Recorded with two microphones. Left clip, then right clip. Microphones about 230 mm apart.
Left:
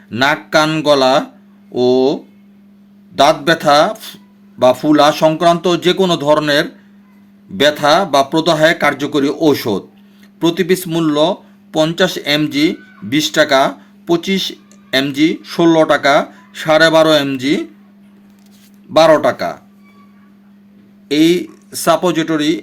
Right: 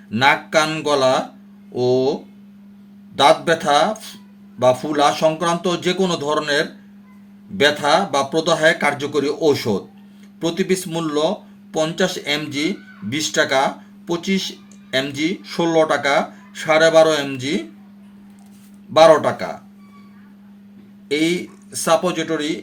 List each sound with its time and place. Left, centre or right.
0.1 s speech: left
3.2 s speech: left
18.9 s speech: left
21.1 s speech: left